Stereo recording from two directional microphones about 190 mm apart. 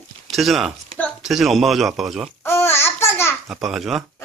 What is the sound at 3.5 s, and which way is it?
Speech, centre (ahead or behind).